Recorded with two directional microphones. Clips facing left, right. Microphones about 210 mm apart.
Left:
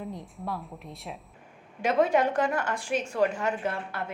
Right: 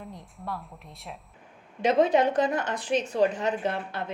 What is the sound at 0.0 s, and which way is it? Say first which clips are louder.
Speech: left 4 dB; centre (ahead or behind).